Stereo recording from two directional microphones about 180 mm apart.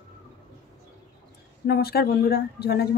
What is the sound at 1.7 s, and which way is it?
Speech, 60° left (ahead or behind).